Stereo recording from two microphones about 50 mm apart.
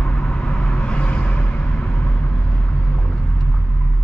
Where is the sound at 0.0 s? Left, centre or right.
Left.